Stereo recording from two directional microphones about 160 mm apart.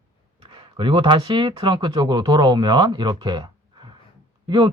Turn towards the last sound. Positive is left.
turn(degrees=-30)  # may be behind; listen again after turning